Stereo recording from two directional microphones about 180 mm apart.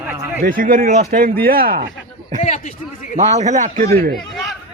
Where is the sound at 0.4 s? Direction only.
50° right (ahead or behind).